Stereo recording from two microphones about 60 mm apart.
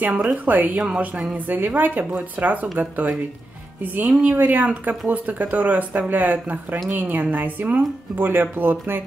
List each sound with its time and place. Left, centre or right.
0.0 s a woman's voice: right
0.7 s speech: centre
1.3 s a woman's voice: right
3.8 s a woman's voice: right